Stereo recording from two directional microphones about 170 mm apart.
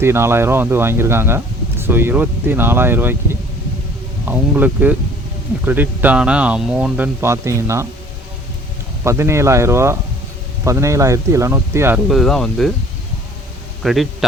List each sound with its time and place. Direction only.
0.0 s speech: 15° right (ahead or behind)
4.3 s speech: 10° right (ahead or behind)
9.0 s speech: 15° right (ahead or behind)
12.0 s speech: centre (ahead or behind)
13.8 s speech: centre (ahead or behind)